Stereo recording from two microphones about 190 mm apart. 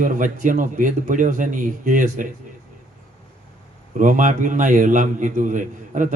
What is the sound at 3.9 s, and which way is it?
A man's voice, 40° right (ahead or behind).